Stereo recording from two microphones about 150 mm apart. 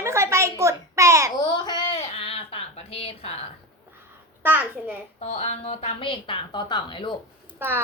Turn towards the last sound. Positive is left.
turn(degrees=-15)  # may be behind; listen again after turning